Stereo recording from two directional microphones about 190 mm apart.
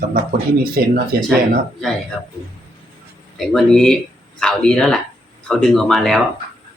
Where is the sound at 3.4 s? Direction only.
Centre (ahead or behind).